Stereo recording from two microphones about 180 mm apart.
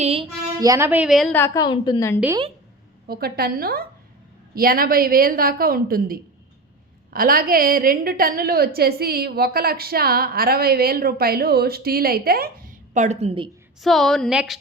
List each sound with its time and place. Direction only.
0.0 s speech: 35° right (ahead or behind)
0.6 s a woman's voice: 15° right (ahead or behind)
1.3 s a woman's voice: 15° left (ahead or behind)
3.1 s a woman's voice: 60° right (ahead or behind); by 13.5 s 30° right (ahead or behind)
13.8 s a woman's voice: centre (ahead or behind)